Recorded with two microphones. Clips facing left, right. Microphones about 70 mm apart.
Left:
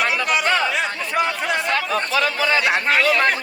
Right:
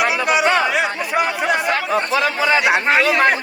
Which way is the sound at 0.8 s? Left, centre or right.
Centre.